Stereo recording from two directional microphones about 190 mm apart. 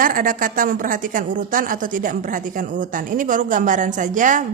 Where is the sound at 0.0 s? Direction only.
45° right (ahead or behind).